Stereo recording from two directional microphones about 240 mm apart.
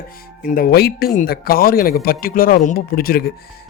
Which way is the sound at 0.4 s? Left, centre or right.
Left.